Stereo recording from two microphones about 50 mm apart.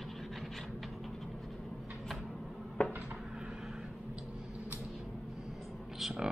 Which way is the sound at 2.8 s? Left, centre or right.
Left.